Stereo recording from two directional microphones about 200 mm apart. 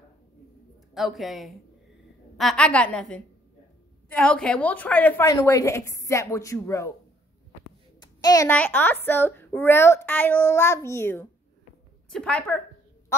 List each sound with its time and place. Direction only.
0.9 s a woman's voice: centre (ahead or behind); by 6.9 s 15° left (ahead or behind)
8.0 s a child's voice: 20° left (ahead or behind)